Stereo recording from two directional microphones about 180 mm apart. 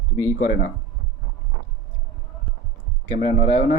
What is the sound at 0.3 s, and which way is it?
Speech, 55° left (ahead or behind).